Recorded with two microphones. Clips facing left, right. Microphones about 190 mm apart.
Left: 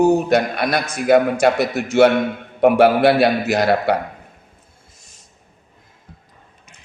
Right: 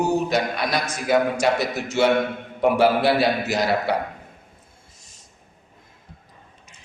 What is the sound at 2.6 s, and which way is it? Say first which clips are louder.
A man's voice: left 5 dB; 60° left (ahead or behind).